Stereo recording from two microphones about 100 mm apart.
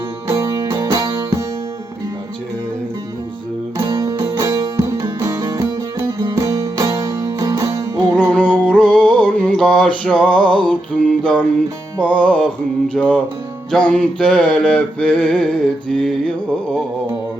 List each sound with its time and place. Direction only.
0.3 s music: 40° right (ahead or behind)
3.8 s music: 35° right (ahead or behind)
8.1 s a sound: 10° left (ahead or behind)
11.9 s music: 10° left (ahead or behind)